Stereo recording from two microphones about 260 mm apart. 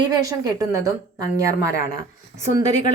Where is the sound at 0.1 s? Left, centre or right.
Centre.